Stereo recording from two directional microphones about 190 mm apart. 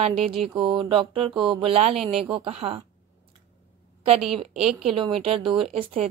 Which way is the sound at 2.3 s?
30° right (ahead or behind).